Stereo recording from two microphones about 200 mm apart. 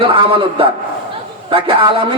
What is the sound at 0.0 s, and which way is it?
A man's voice, 25° right (ahead or behind).